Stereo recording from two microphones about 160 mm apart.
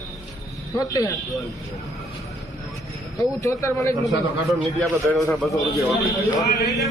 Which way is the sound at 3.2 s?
20° left (ahead or behind).